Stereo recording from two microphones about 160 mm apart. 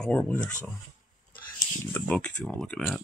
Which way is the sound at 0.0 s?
5° left (ahead or behind).